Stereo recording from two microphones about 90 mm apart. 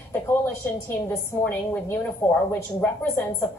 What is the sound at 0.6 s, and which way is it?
A woman's voice, 25° left (ahead or behind).